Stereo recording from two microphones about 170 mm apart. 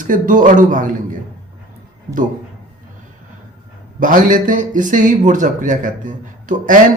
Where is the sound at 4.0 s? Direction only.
50° right (ahead or behind).